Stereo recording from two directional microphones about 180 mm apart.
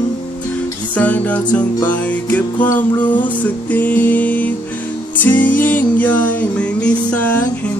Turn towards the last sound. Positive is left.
turn(degrees=10)  # may be behind; listen again after turning